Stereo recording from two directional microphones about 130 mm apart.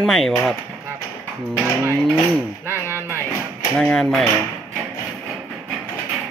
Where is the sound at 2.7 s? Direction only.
20° left (ahead or behind).